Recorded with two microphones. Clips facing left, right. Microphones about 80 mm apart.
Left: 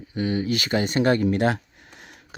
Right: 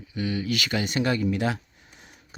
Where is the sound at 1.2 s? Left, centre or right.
Left.